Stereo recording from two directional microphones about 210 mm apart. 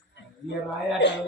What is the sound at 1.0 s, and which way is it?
Speech, 60° left (ahead or behind).